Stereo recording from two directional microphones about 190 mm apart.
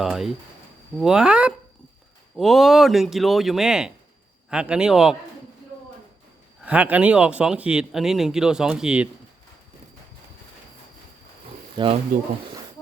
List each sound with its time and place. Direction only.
0.0 s speech: centre (ahead or behind)
6.7 s speech: 10° right (ahead or behind)
11.8 s speech: 25° right (ahead or behind)